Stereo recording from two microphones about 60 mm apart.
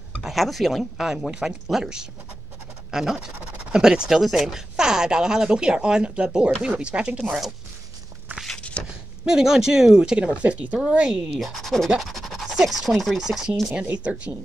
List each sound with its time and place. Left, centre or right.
0.2 s speech: centre
8.5 s a sound: centre
9.2 s speech: centre
11.3 s speech: centre
13.9 s speech: centre